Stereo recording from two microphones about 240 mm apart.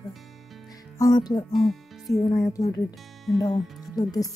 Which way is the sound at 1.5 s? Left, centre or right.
Centre.